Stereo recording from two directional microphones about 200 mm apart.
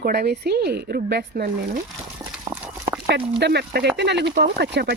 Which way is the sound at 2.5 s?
10° right (ahead or behind).